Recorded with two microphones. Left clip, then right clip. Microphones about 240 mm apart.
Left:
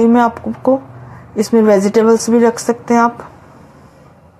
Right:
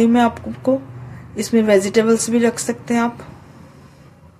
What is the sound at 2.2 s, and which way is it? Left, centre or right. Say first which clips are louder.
Speech: left 6 dB; centre.